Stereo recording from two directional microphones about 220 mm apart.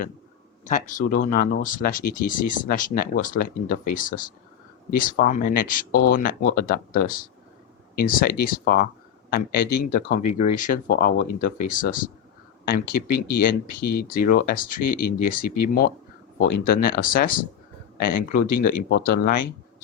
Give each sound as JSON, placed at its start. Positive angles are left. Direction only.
{"t": 0.6, "sound": "speech", "side_deg": 35}